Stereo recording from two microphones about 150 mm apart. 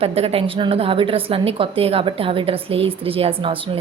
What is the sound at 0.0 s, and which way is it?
A woman's voice, 40° right (ahead or behind).